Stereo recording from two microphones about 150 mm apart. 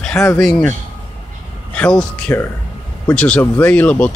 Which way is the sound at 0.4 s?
Centre (ahead or behind).